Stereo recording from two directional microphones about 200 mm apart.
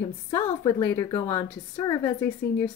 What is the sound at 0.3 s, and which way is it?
A woman's voice, 20° left (ahead or behind).